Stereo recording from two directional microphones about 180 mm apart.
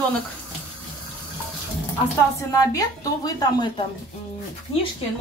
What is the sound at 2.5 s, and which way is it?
Speech, 20° left (ahead or behind).